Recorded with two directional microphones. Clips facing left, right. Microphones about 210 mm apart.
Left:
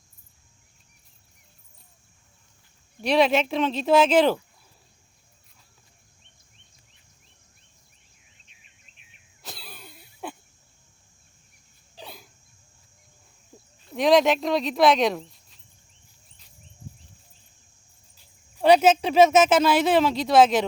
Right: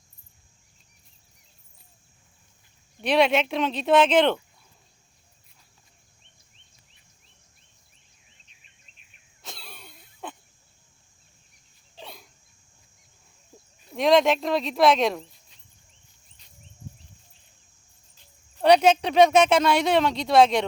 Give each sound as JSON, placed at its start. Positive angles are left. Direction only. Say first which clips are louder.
{"t": 3.0, "sound": "speech", "louder": "left 1 dB", "side_deg": 0}
{"t": 9.4, "sound": "a sound", "louder": "left 1 dB", "side_deg": 0}
{"t": 11.9, "sound": "hiccup", "louder": "left 1 dB", "side_deg": 0}
{"t": 13.9, "sound": "speech", "louder": "left 1 dB", "side_deg": 0}
{"t": 18.5, "sound": "speech", "louder": "left 1 dB", "side_deg": 5}